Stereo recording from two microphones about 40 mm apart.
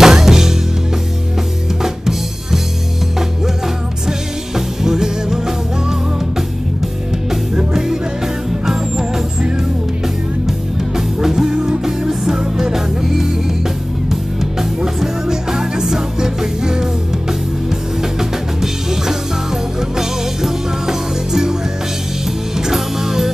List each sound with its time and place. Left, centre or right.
0.0 s music: centre
1.8 s drum kit: centre
4.6 s music: centre
11.0 s music: centre
11.5 s music: right
11.8 s music: centre
14.6 s music: centre
22.6 s music: centre